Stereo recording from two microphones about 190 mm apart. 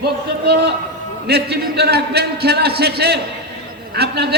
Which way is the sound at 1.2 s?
55° right (ahead or behind).